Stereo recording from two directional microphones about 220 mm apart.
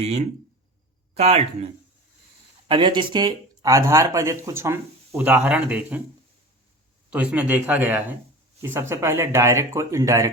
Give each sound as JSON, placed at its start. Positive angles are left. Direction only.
{"t": 0.0, "sound": "speech", "side_deg": -30}
{"t": 2.6, "sound": "speech", "side_deg": -20}
{"t": 7.1, "sound": "speech", "side_deg": -5}